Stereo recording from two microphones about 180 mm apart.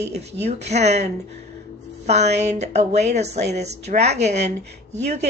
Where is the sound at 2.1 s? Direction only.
40° right (ahead or behind).